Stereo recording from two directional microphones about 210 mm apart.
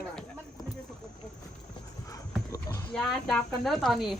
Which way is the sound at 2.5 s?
15° left (ahead or behind).